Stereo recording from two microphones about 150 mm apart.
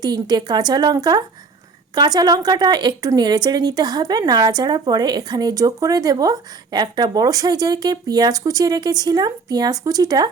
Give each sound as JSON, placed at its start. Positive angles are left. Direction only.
{"t": 0.0, "sound": "speech", "side_deg": -25}